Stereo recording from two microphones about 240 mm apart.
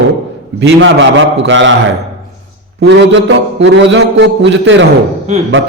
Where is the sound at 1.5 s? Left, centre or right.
Right.